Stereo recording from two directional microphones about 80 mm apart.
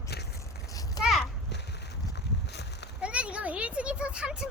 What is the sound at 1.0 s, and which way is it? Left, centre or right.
Children playing, left.